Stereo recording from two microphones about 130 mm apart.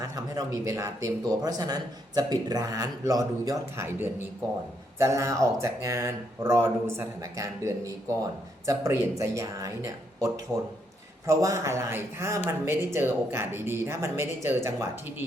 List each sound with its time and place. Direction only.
0.0 s speech: 25° right (ahead or behind)